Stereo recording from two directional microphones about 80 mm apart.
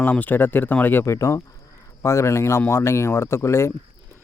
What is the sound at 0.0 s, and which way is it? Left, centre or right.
Speech, left.